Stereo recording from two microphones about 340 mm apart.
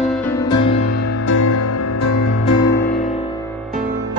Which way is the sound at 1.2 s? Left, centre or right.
Left.